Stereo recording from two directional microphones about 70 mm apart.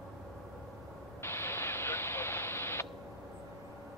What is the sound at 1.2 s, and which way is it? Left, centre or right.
Radio, left.